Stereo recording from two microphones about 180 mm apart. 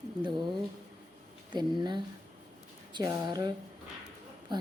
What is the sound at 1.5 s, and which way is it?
A woman's voice, 25° right (ahead or behind).